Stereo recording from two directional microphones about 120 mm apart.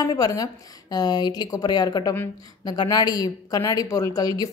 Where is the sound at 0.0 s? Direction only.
35° left (ahead or behind).